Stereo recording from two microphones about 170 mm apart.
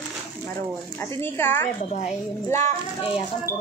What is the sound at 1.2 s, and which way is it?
Speech, 15° left (ahead or behind).